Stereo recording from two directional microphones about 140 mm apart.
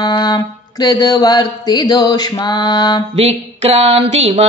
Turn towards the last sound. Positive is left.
turn(degrees=-50)  # may be behind; listen again after turning